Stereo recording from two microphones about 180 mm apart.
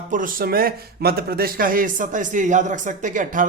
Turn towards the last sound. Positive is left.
turn(degrees=-45)  # may be behind; listen again after turning